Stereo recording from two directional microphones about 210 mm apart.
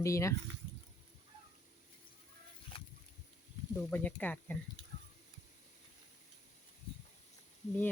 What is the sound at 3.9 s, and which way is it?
Speech, 10° left (ahead or behind).